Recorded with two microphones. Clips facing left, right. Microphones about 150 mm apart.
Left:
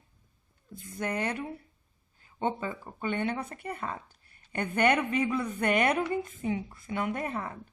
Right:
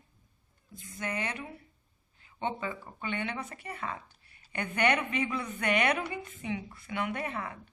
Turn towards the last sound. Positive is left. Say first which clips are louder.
# left 2 dB
turn(degrees=35)  # may be behind; listen again after turning